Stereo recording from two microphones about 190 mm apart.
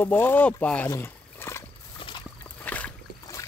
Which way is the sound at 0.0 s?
10° left (ahead or behind).